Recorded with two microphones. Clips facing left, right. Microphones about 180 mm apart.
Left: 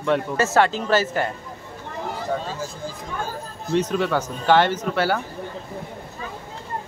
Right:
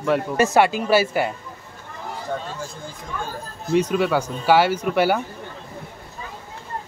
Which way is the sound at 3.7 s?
10° right (ahead or behind).